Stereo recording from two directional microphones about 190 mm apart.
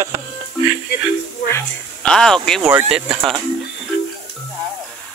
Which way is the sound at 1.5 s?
15° left (ahead or behind).